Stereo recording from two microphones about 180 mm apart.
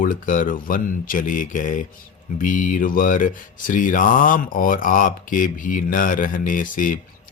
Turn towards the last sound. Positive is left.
turn(degrees=50)  # may be behind; listen again after turning